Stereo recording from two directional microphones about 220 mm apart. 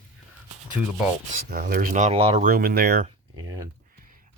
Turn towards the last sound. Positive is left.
turn(degrees=-15)  # may be behind; listen again after turning